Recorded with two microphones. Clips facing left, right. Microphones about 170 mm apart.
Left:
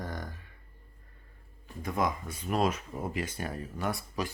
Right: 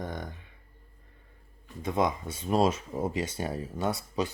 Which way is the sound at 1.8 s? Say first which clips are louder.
Right 3 dB; 25° right (ahead or behind).